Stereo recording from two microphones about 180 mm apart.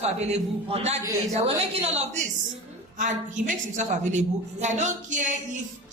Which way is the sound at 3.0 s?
45° right (ahead or behind).